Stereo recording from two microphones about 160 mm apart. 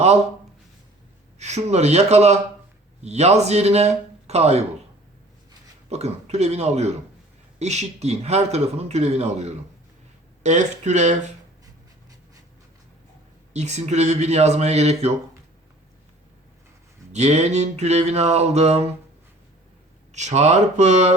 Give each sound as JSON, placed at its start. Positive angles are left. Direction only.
{"t": 1.4, "sound": "a man's voice", "side_deg": -45}
{"t": 5.9, "sound": "a man's voice", "side_deg": -40}
{"t": 13.5, "sound": "a man's voice", "side_deg": -45}
{"t": 17.1, "sound": "a man's voice", "side_deg": -45}
{"t": 20.1, "sound": "a man's voice", "side_deg": -45}